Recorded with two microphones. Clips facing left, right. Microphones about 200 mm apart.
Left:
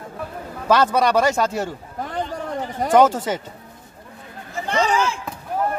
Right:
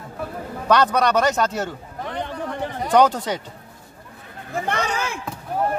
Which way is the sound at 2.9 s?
5° left (ahead or behind).